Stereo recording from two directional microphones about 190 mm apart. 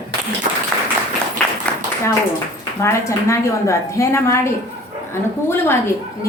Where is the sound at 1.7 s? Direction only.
5° left (ahead or behind).